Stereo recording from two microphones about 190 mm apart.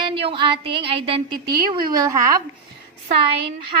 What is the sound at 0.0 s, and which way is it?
Speech, 25° right (ahead or behind).